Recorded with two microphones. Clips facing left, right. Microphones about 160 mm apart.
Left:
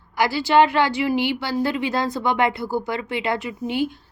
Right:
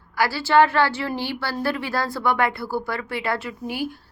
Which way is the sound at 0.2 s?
15° left (ahead or behind).